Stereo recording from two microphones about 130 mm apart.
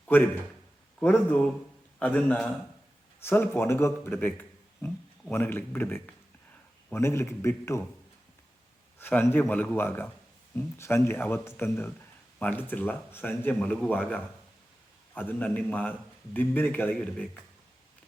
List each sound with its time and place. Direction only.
0.1 s a man's voice: 15° left (ahead or behind)
2.0 s a man's voice: 10° left (ahead or behind)
4.3 s a sound: 15° left (ahead or behind)
5.3 s a man's voice: 15° left (ahead or behind)
9.0 s a man's voice: 15° left (ahead or behind)